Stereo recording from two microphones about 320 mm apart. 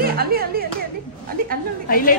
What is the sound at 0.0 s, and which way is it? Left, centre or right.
Clapping, right.